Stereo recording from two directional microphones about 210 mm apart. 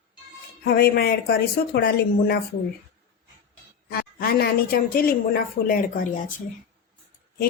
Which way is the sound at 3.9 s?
45° left (ahead or behind).